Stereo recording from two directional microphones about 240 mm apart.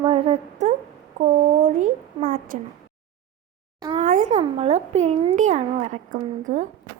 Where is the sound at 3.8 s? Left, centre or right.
Centre.